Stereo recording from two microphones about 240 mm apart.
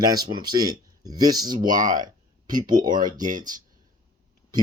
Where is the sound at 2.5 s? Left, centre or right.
Centre.